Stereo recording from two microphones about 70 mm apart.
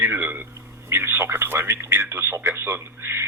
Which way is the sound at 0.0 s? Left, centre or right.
Right.